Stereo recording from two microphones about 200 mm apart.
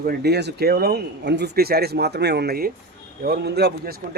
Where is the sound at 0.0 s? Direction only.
50° right (ahead or behind).